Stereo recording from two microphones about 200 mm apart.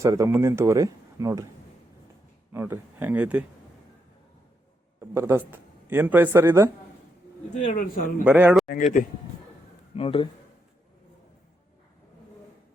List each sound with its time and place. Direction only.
0.0 s speech: 15° right (ahead or behind)
2.5 s speech: 10° right (ahead or behind)
4.9 s speech: 15° right (ahead or behind)
7.5 s speech: 40° left (ahead or behind)
8.2 s speech: 10° right (ahead or behind)
8.6 s speech: 45° left (ahead or behind)
9.9 s speech: 25° left (ahead or behind)